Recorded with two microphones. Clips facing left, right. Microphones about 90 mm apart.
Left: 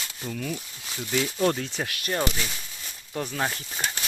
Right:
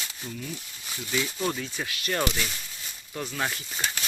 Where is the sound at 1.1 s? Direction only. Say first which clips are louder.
Left 5 dB; 50° left (ahead or behind).